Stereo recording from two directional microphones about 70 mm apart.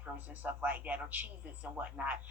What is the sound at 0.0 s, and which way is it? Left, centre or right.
Speech, right.